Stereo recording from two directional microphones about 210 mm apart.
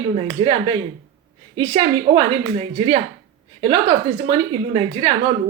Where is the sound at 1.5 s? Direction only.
25° right (ahead or behind).